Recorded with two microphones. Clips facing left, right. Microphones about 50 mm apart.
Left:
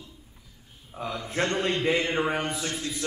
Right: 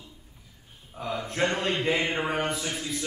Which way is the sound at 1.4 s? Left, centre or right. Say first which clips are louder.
Left 1 dB; centre.